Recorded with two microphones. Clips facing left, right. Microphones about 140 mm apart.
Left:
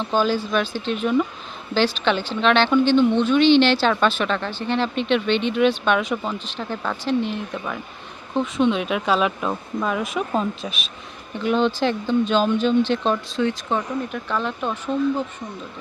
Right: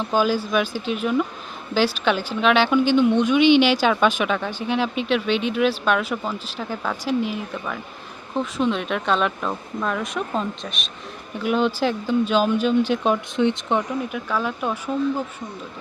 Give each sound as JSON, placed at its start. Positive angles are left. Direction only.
{"t": 0.0, "sound": "a woman's voice", "side_deg": -10}
{"t": 13.3, "sound": "speech", "side_deg": -20}
{"t": 14.1, "sound": "a woman's voice", "side_deg": -5}